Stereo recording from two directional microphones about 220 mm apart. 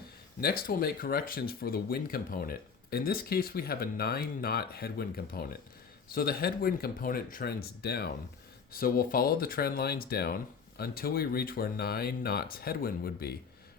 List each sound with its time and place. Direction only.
0.4 s speech: 45° left (ahead or behind)